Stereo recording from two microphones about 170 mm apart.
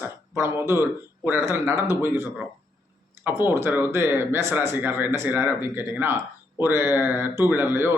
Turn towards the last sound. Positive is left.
turn(degrees=-15)  # may be behind; listen again after turning